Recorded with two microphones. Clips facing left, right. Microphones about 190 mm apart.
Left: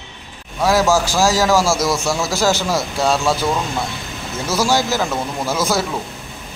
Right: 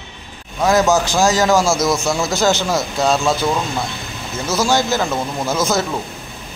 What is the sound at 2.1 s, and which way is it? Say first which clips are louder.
Speech: right 1 dB; 5° left (ahead or behind).